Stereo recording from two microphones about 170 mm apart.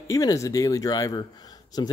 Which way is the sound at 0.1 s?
20° left (ahead or behind).